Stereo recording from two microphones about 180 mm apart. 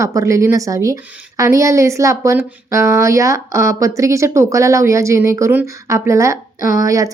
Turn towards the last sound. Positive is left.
turn(degrees=-20)  # may be behind; listen again after turning